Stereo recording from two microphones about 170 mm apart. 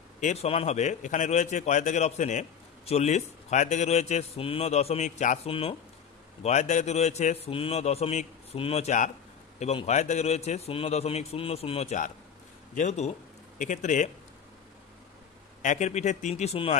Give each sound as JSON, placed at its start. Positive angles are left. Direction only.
{"t": 0.2, "sound": "a man's voice", "side_deg": 40}
{"t": 5.5, "sound": "a man's voice", "side_deg": 35}
{"t": 15.6, "sound": "a man's voice", "side_deg": 45}